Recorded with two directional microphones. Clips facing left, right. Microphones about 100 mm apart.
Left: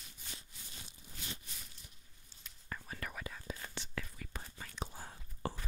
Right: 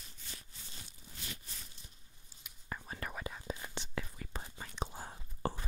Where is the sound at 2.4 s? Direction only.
20° right (ahead or behind).